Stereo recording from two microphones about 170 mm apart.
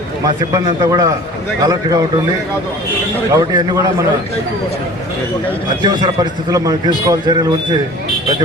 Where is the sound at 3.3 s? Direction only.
20° right (ahead or behind).